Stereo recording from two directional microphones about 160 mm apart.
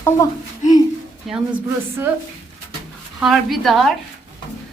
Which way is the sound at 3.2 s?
Centre (ahead or behind).